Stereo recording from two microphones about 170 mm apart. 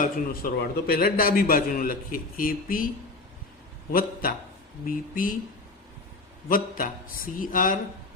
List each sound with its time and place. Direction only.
0.0 s a man's voice: 60° left (ahead or behind)
3.9 s a man's voice: 55° left (ahead or behind)
6.5 s speech: 55° left (ahead or behind)